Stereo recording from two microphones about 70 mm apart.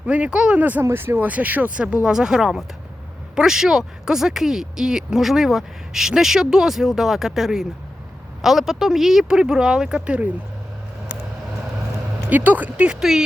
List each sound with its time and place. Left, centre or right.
0.0 s speech: centre
12.3 s speech: right
13.0 s speech: centre